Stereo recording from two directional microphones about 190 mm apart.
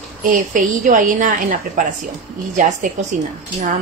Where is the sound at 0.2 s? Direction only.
45° right (ahead or behind).